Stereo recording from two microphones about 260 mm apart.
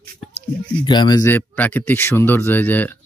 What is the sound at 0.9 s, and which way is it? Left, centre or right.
Speech, centre.